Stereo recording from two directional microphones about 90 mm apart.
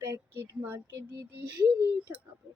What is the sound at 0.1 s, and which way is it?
Speech, 25° right (ahead or behind).